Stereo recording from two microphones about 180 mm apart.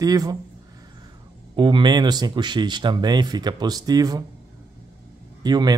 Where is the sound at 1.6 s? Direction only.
25° right (ahead or behind).